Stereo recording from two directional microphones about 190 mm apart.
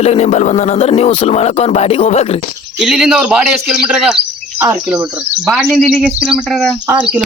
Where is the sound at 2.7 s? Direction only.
5° right (ahead or behind).